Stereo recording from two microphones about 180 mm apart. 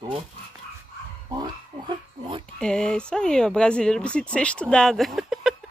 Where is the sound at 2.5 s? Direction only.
5° left (ahead or behind).